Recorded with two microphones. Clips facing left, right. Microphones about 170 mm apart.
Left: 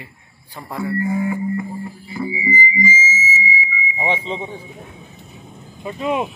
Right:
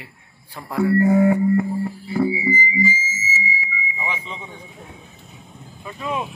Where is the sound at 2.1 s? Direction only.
65° right (ahead or behind).